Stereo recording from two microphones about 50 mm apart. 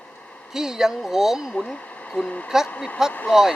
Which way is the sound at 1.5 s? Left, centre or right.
Centre.